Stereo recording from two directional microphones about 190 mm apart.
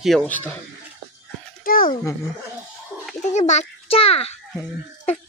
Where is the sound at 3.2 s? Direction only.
40° left (ahead or behind).